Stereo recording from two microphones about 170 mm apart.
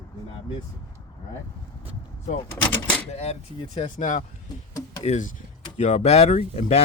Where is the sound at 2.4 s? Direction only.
15° left (ahead or behind).